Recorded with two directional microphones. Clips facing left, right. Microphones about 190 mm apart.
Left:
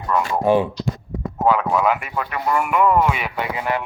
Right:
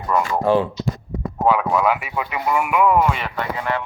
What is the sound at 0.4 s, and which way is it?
Speech, 15° left (ahead or behind).